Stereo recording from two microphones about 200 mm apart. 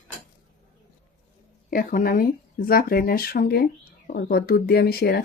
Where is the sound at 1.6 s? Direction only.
45° left (ahead or behind).